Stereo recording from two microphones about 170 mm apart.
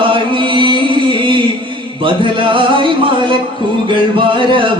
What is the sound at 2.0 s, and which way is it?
Music, 30° right (ahead or behind).